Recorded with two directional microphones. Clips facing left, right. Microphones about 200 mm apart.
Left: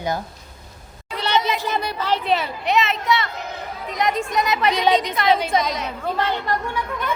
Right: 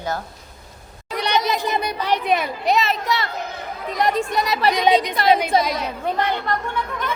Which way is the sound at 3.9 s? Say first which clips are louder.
Right 2 dB; 35° right (ahead or behind).